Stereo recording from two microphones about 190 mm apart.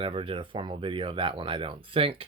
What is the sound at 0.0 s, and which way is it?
Speech, 30° right (ahead or behind).